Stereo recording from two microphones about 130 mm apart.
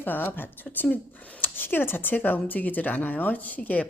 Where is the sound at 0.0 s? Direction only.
15° left (ahead or behind).